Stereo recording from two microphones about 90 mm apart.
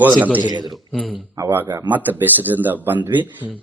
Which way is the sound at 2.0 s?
20° right (ahead or behind).